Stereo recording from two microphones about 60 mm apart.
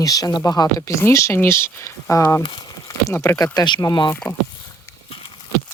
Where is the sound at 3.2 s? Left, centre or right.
Left.